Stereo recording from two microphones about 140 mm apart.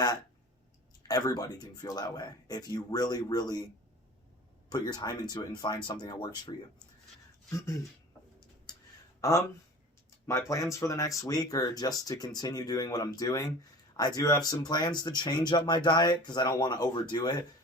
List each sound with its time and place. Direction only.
1.0 s speech: 30° left (ahead or behind)
4.7 s speech: 30° left (ahead or behind)
8.7 s a sound: 30° left (ahead or behind)
9.2 s speech: 25° left (ahead or behind)